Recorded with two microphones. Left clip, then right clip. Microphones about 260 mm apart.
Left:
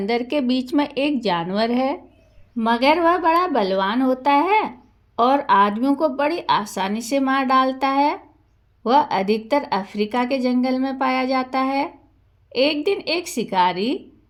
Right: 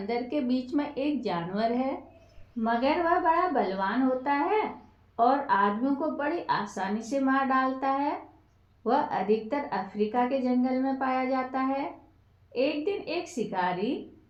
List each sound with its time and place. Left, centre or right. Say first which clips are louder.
0.0 s a woman's voice: left 9 dB; left